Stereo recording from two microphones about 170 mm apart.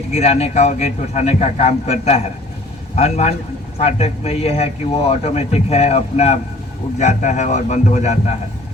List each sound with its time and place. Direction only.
0.1 s a man's voice: 40° left (ahead or behind)